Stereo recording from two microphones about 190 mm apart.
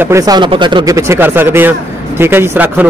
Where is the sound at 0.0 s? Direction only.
15° right (ahead or behind).